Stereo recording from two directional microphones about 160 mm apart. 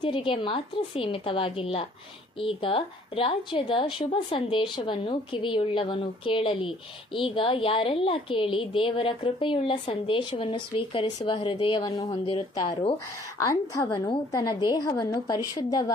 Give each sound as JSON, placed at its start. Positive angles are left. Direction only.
{"t": 0.0, "sound": "a woman's voice", "side_deg": 30}
{"t": 13.4, "sound": "a woman's voice", "side_deg": 20}